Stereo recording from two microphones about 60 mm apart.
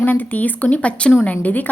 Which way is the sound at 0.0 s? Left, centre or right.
Left.